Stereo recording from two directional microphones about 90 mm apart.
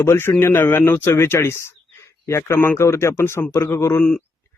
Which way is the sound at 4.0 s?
15° left (ahead or behind).